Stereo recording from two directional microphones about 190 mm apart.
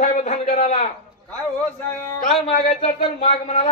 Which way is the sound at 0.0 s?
35° left (ahead or behind).